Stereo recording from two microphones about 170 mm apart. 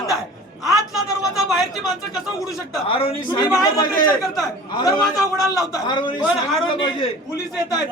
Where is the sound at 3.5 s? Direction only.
20° left (ahead or behind).